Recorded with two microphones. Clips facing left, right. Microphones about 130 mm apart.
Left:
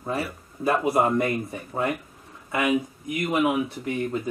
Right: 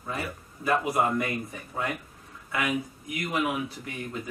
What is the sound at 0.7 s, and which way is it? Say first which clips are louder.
Speech: left 4 dB; 30° left (ahead or behind).